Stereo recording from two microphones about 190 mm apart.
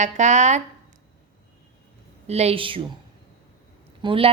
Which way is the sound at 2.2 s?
35° right (ahead or behind).